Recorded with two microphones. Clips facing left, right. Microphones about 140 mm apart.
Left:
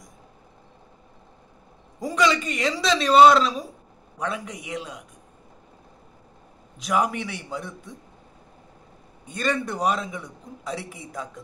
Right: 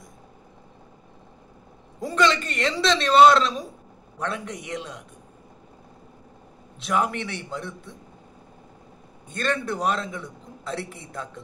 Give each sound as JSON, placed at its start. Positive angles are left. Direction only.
{"t": 2.0, "sound": "a man's voice", "side_deg": 10}
{"t": 6.8, "sound": "a man's voice", "side_deg": 10}
{"t": 9.3, "sound": "a man's voice", "side_deg": 10}
{"t": 11.1, "sound": "a man's voice", "side_deg": 0}